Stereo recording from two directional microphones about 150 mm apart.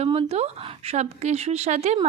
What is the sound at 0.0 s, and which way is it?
A woman's voice, 40° right (ahead or behind).